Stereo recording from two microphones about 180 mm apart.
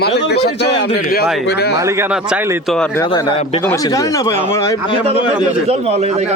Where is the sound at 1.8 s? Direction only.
15° right (ahead or behind).